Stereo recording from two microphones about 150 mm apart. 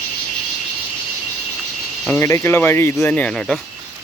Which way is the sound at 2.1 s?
20° left (ahead or behind).